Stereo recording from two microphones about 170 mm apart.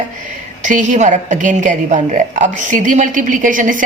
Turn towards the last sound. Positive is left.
turn(degrees=-50)  # may be behind; listen again after turning